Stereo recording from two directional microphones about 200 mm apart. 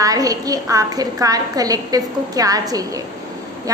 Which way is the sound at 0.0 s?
20° right (ahead or behind).